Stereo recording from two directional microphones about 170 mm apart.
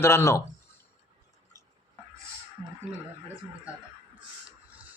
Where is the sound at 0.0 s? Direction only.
15° left (ahead or behind).